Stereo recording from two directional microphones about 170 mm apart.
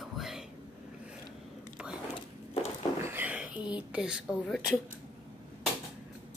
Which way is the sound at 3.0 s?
15° right (ahead or behind).